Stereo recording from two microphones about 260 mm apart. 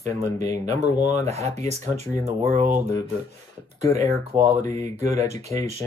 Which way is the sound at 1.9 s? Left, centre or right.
Right.